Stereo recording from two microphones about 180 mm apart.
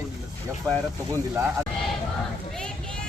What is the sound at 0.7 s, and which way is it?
Speech, 15° right (ahead or behind).